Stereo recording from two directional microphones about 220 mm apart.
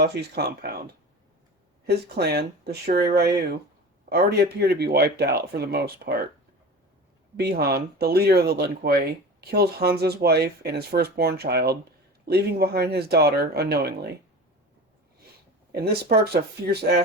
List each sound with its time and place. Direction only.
0.0 s speech: 45° right (ahead or behind)
1.9 s speech: 45° right (ahead or behind)
7.3 s speech: 45° right (ahead or behind)
15.7 s speech: 45° right (ahead or behind)